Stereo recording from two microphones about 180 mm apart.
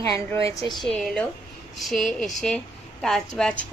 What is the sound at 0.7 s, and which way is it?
A woman's voice, centre (ahead or behind).